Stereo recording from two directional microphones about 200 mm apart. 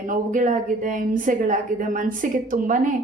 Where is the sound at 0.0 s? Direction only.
40° right (ahead or behind).